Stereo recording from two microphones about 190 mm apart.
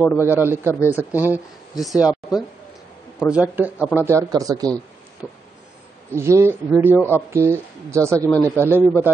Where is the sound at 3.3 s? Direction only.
5° right (ahead or behind).